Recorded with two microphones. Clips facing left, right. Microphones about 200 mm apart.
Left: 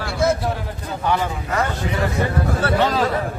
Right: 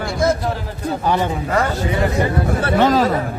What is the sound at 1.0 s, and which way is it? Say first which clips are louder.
Speech: right 2 dB; 35° right (ahead or behind).